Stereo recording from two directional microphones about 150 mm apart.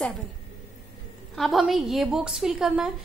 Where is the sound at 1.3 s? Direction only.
Centre (ahead or behind).